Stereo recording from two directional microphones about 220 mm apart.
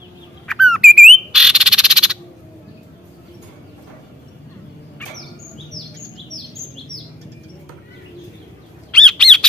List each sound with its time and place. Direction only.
0.5 s squawk: centre (ahead or behind)
8.9 s bird: 5° left (ahead or behind)